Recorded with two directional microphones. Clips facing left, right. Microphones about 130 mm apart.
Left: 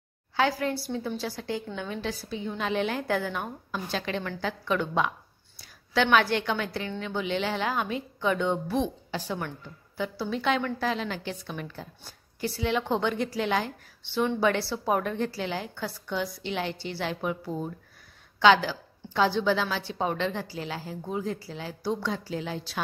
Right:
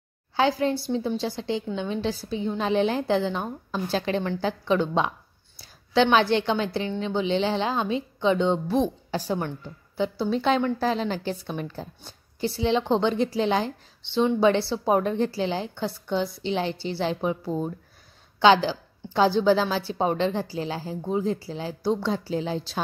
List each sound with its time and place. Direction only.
0.4 s a woman's voice: 25° right (ahead or behind)
8.8 s a woman's voice: 40° right (ahead or behind)
9.9 s a woman's voice: 25° right (ahead or behind)